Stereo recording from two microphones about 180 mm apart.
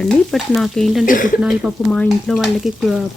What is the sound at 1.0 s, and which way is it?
Speech, 50° left (ahead or behind).